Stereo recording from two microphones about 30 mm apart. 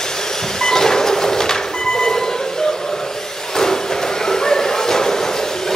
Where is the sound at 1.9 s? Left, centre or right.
Left.